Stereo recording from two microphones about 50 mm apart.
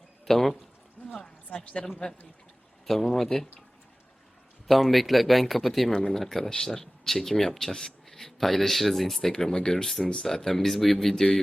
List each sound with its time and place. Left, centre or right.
0.3 s speech: centre
1.0 s a sound: centre
1.5 s speech: left
4.7 s speech: centre
5.9 s speech: centre